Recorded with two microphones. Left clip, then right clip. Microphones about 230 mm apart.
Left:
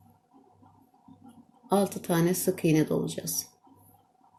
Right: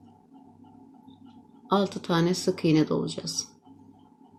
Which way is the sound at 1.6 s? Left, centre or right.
Centre.